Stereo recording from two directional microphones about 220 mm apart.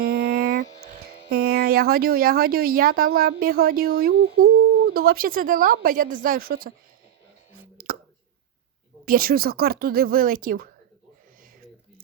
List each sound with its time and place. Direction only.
0.0 s a sound: 45° right (ahead or behind)
1.3 s a woman's voice: 45° right (ahead or behind)
7.5 s whispering: 40° right (ahead or behind)
9.0 s speech: 40° right (ahead or behind)